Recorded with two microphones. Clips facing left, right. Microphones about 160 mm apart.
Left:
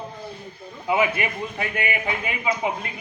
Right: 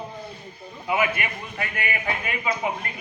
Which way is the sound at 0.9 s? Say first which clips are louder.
Left 3 dB; 20° left (ahead or behind).